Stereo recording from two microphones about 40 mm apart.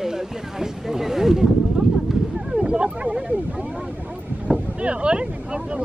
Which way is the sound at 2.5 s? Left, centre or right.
Right.